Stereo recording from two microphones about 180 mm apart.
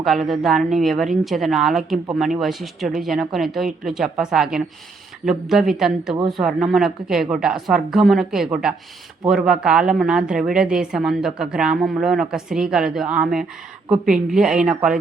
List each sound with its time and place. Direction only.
0.3 s speech: centre (ahead or behind)